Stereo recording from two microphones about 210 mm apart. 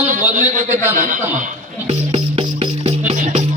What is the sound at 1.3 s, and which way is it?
Music, 30° right (ahead or behind).